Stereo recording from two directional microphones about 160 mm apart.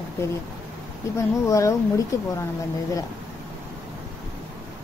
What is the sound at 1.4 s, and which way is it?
Speech, 20° left (ahead or behind).